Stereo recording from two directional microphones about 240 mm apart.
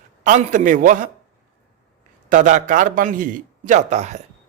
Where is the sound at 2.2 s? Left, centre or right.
Right.